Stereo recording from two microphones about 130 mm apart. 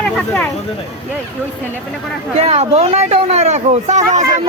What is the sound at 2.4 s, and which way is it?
Speech, 55° right (ahead or behind).